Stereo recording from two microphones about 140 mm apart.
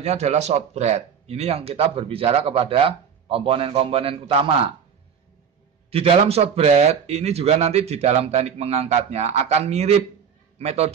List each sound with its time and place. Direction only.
0.0 s speech: 50° right (ahead or behind)
5.9 s speech: 45° right (ahead or behind)